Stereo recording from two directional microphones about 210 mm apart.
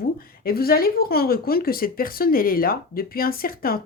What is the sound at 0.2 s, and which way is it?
Speech, 45° left (ahead or behind).